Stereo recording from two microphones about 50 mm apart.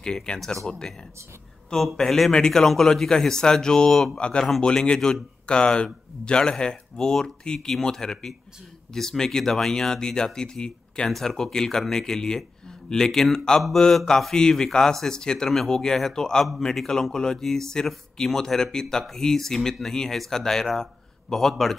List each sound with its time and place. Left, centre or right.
0.0 s speech: centre
2.0 s speech: centre
4.1 s speech: left; by 21.7 s centre